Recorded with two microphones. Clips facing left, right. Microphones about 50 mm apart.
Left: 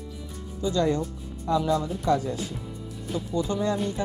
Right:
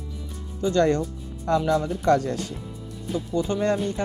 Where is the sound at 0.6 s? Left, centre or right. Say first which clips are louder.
Right 4 dB; right.